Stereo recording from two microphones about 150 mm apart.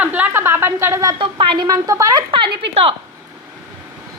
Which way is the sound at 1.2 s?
35° right (ahead or behind).